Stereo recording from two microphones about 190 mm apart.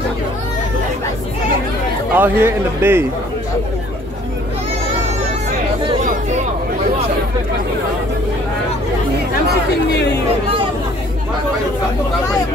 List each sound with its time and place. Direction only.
2.1 s a man's voice: 10° right (ahead or behind)
9.8 s speech: 60° left (ahead or behind)